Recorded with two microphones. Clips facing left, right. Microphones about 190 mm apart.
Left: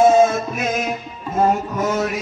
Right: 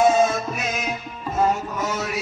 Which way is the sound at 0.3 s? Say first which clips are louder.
Left 4 dB; 50° left (ahead or behind).